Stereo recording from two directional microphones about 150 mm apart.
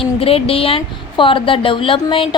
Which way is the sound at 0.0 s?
40° left (ahead or behind).